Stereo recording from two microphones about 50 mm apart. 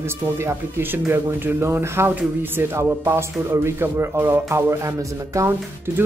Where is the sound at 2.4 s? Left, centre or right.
Right.